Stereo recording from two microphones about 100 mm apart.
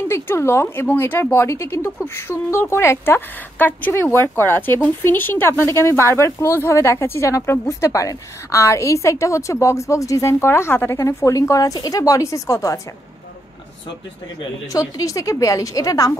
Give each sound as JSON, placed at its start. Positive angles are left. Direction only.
{"t": 0.1, "sound": "speech", "side_deg": 25}
{"t": 13.8, "sound": "speech", "side_deg": 50}
{"t": 14.7, "sound": "a woman's voice", "side_deg": 35}